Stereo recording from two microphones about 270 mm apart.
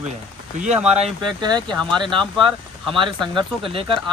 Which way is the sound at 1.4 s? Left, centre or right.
Centre.